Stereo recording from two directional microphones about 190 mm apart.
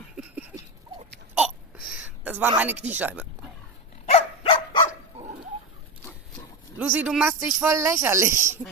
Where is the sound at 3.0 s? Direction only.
10° right (ahead or behind).